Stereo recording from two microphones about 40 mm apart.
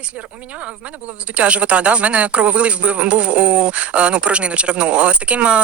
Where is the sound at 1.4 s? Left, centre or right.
Right.